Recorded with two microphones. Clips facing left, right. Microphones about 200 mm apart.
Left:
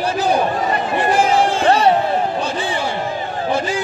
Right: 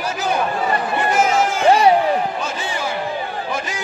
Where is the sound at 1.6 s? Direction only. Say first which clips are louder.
Right 2 dB; 10° right (ahead or behind).